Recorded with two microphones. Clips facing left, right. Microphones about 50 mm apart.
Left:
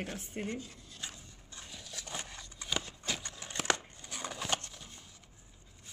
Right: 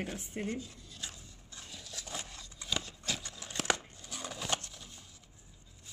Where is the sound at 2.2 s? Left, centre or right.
Left.